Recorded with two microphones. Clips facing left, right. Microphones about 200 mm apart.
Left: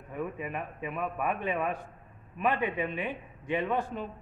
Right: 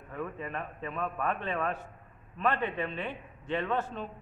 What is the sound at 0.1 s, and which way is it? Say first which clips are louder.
A man's voice: left 2 dB; 15° left (ahead or behind).